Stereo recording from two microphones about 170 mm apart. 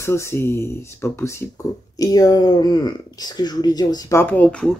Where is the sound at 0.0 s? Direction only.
15° left (ahead or behind).